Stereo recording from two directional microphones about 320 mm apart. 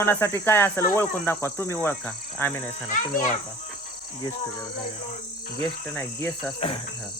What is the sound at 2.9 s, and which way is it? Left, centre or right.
Speech, left.